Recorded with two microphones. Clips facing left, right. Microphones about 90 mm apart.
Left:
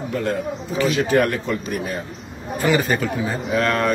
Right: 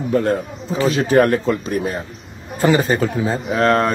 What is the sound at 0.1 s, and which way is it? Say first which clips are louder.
Speech: right 5 dB; 40° right (ahead or behind).